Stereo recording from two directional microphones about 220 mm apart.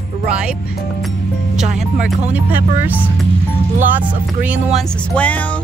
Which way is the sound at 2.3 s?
5° right (ahead or behind).